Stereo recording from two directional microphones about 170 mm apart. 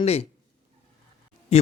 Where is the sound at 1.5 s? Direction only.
35° left (ahead or behind).